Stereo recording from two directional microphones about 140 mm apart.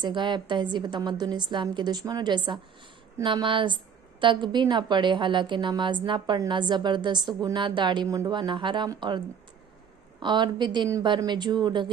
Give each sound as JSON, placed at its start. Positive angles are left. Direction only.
{"t": 0.0, "sound": "a woman's voice", "side_deg": -35}